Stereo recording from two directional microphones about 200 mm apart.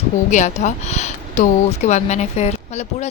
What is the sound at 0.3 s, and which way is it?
Speech, 35° left (ahead or behind).